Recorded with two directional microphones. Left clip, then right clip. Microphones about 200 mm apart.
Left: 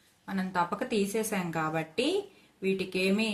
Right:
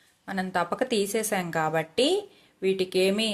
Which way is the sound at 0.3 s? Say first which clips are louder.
Right 3 dB; 45° right (ahead or behind).